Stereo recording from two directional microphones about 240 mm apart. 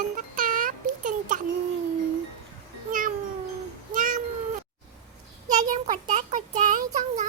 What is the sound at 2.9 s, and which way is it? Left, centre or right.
Cat, right.